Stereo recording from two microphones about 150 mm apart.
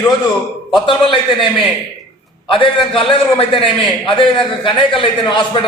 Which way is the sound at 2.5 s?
35° left (ahead or behind).